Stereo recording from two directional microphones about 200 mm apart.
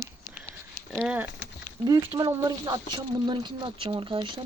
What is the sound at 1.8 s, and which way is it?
Speech, 20° right (ahead or behind).